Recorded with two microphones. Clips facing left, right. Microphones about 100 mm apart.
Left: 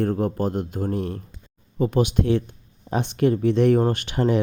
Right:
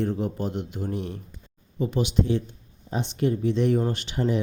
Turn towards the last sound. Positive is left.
turn(degrees=65)  # may be behind; listen again after turning